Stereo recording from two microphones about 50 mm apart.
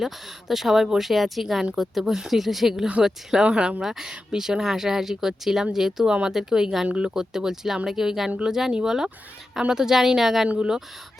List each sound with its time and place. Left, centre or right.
0.0 s speech: centre
3.4 s speech: centre
6.8 s speech: right
7.1 s speech: centre